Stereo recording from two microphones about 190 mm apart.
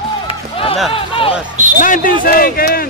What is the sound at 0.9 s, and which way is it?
Speech, 30° left (ahead or behind).